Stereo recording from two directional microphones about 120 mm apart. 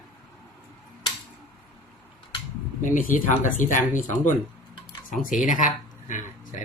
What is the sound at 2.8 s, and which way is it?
Speech, 90° left.